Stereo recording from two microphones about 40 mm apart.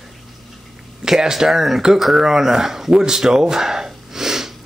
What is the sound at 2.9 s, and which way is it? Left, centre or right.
Gasp, centre.